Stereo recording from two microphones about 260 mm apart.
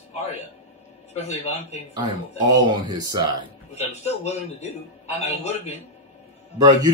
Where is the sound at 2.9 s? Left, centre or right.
Centre.